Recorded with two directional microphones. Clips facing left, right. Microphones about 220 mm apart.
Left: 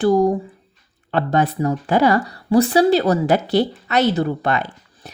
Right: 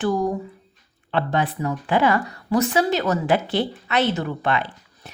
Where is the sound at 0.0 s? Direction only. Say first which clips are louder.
Left 7 dB; 35° left (ahead or behind).